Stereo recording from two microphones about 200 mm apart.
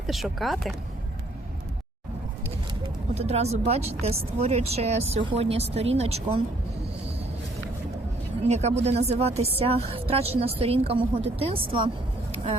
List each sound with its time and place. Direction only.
0.1 s speech: centre (ahead or behind)
3.2 s speech: 30° right (ahead or behind)
8.4 s speech: 35° right (ahead or behind)